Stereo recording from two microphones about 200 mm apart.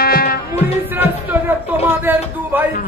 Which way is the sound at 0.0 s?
50° left (ahead or behind).